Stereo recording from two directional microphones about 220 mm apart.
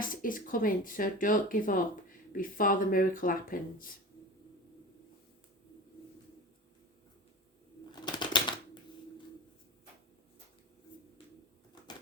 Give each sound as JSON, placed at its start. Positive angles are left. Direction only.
{"t": 0.0, "sound": "speech", "side_deg": 40}
{"t": 8.0, "sound": "typewriter", "side_deg": 20}